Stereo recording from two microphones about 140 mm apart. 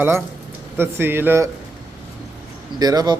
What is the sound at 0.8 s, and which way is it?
Speech, 15° right (ahead or behind).